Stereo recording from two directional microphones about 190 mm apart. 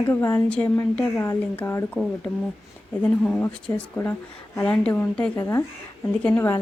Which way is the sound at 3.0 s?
5° left (ahead or behind).